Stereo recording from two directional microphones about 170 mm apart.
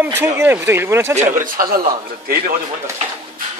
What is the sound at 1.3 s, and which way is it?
Speech, 55° right (ahead or behind).